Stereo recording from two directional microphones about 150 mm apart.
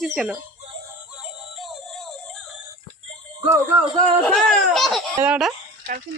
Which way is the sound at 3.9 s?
5° left (ahead or behind).